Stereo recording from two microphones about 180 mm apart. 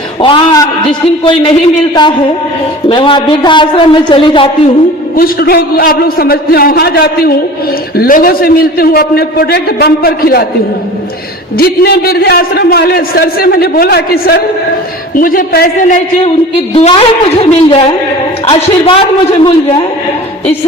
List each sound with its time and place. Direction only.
0.2 s a man's voice: 25° left (ahead or behind)
2.9 s a man's voice: 25° left (ahead or behind)
5.1 s a man's voice: 55° left (ahead or behind)
11.5 s a man's voice: 60° left (ahead or behind)
16.7 s a man's voice: 35° left (ahead or behind)